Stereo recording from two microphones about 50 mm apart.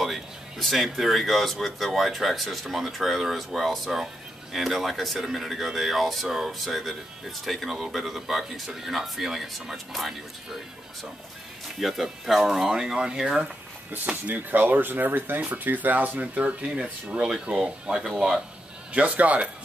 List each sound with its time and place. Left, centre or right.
0.0 s speech: centre
11.8 s speech: centre
13.9 s speech: right
18.9 s speech: right